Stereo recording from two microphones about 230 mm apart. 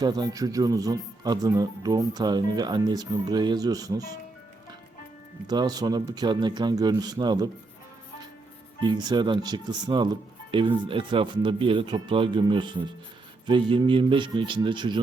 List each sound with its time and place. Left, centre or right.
0.0 s speech: centre
5.5 s speech: centre
8.8 s speech: centre